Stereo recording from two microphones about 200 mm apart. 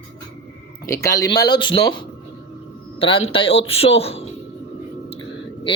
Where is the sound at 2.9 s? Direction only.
25° left (ahead or behind).